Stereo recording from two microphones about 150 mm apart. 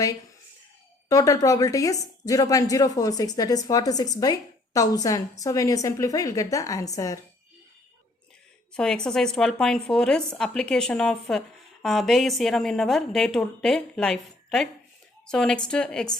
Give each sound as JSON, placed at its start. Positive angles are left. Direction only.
{"t": 1.0, "sound": "speech", "side_deg": 20}
{"t": 8.7, "sound": "speech", "side_deg": 5}